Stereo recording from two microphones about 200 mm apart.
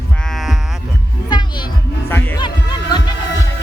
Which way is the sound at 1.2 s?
20° left (ahead or behind).